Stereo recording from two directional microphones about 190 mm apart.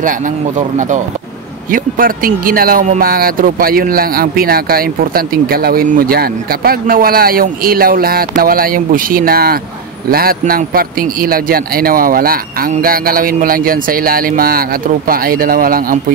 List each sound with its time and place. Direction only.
0.6 s speech: 40° right (ahead or behind)